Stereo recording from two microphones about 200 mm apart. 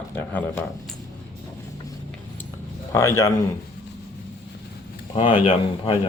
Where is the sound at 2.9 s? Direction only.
15° left (ahead or behind).